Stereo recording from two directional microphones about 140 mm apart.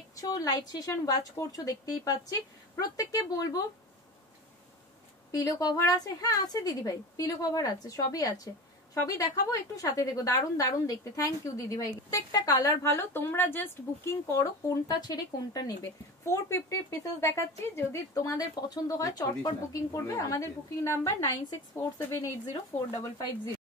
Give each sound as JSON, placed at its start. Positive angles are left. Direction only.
{"t": 0.1, "sound": "a woman's voice", "side_deg": 25}
{"t": 5.3, "sound": "a woman's voice", "side_deg": 25}